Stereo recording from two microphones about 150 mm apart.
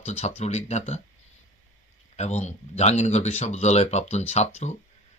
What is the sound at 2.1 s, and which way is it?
Speech, 45° left (ahead or behind).